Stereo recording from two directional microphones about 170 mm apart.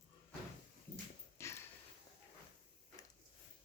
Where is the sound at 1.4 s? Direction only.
15° left (ahead or behind).